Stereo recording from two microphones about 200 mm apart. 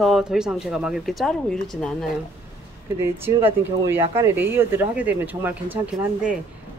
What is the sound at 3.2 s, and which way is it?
Speech, 10° right (ahead or behind).